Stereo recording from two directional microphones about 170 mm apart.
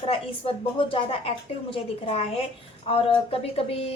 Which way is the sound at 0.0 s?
35° left (ahead or behind).